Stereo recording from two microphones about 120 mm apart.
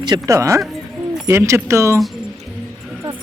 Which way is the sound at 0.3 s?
25° right (ahead or behind).